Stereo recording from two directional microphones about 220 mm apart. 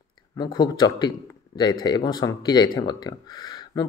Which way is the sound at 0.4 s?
20° left (ahead or behind).